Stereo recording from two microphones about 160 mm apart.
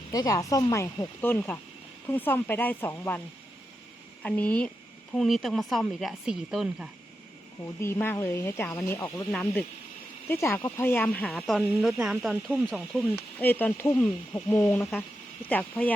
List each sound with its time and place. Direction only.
0.1 s speech: 25° left (ahead or behind)
4.2 s a woman's voice: 10° left (ahead or behind)
7.8 s speech: 15° left (ahead or behind)
10.2 s a woman's voice: 15° left (ahead or behind)